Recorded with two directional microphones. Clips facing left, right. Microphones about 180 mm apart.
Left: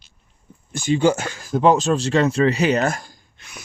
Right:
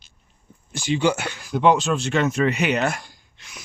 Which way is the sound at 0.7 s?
50° left (ahead or behind).